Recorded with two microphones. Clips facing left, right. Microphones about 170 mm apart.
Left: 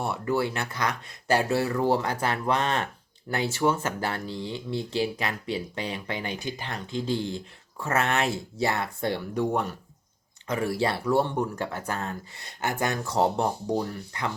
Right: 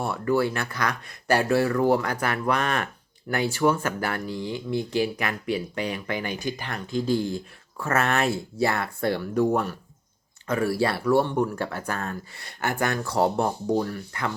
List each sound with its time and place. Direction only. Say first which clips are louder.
0.0 s speech: right 3 dB; 20° left (ahead or behind)
10.4 s speech: right 3 dB; 20° left (ahead or behind)